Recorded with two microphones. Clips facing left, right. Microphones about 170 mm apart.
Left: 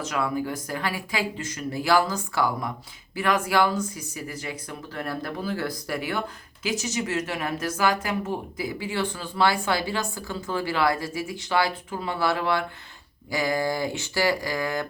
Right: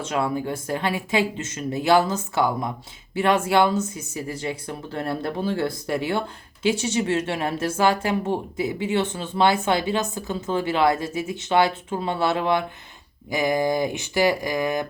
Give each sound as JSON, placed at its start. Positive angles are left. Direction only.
{"t": 0.0, "sound": "speech", "side_deg": -25}